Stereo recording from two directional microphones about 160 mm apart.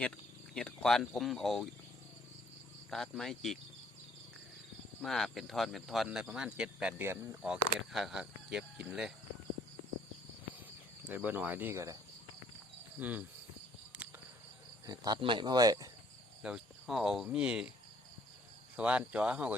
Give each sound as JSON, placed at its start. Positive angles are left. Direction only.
{"t": 0.5, "sound": "speech", "side_deg": 5}
{"t": 2.9, "sound": "speech", "side_deg": 0}
{"t": 5.0, "sound": "speech", "side_deg": 0}
{"t": 11.0, "sound": "speech", "side_deg": -10}
{"t": 13.0, "sound": "speech", "side_deg": -10}
{"t": 14.8, "sound": "speech", "side_deg": -25}
{"t": 16.4, "sound": "speech", "side_deg": -5}
{"t": 18.8, "sound": "speech", "side_deg": -5}